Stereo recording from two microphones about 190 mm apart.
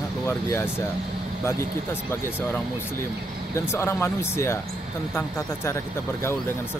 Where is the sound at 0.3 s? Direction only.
10° left (ahead or behind).